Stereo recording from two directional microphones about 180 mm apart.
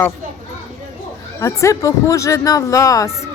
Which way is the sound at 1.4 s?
15° left (ahead or behind).